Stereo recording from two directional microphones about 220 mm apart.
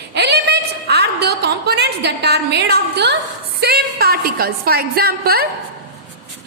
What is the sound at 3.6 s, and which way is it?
A woman's voice, 45° right (ahead or behind).